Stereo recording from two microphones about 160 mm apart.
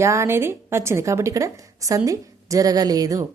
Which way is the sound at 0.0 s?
15° right (ahead or behind).